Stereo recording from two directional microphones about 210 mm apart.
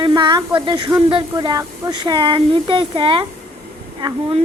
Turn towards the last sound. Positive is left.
turn(degrees=-20)  # may be behind; listen again after turning